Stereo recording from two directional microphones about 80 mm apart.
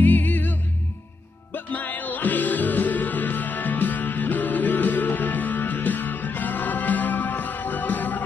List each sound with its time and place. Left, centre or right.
0.0 s music: left